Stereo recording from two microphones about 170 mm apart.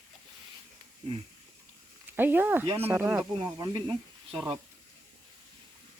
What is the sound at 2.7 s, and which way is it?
Speech, 35° right (ahead or behind).